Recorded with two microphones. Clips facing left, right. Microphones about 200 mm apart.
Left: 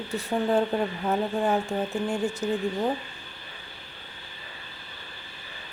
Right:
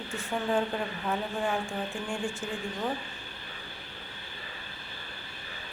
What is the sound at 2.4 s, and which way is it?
Speech, 40° left (ahead or behind).